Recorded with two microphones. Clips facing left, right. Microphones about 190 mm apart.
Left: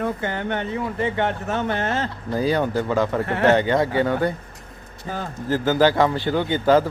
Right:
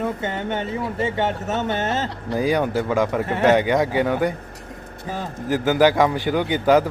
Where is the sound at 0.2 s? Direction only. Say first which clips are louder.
Even; 20° right (ahead or behind).